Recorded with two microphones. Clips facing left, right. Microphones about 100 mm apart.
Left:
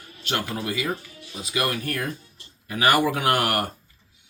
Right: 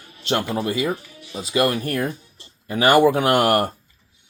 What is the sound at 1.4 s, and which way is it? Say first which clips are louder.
Speech: right 6 dB; 30° right (ahead or behind).